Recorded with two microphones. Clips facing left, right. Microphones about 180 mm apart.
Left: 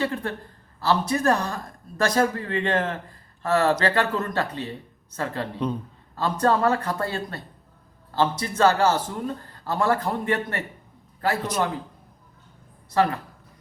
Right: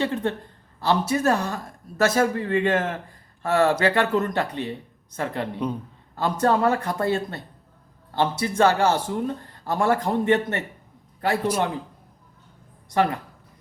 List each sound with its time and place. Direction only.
0.0 s a woman's voice: 25° right (ahead or behind)